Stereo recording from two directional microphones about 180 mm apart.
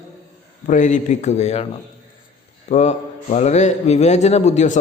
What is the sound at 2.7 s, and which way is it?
A man's voice, 40° left (ahead or behind).